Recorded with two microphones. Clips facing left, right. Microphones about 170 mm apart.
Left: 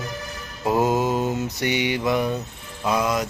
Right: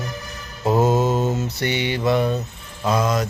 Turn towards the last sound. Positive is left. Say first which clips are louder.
# right 2 dB
turn(degrees=10)  # may be behind; listen again after turning